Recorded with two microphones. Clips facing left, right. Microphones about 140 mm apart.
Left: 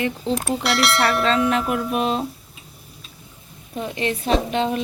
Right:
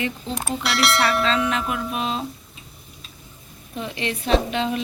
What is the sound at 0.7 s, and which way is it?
Speech, centre (ahead or behind).